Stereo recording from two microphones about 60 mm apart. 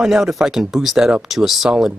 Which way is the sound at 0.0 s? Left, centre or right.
Centre.